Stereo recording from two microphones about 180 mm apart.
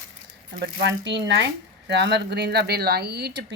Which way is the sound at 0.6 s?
70° right (ahead or behind).